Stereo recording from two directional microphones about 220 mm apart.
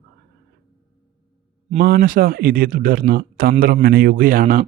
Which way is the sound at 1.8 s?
40° right (ahead or behind).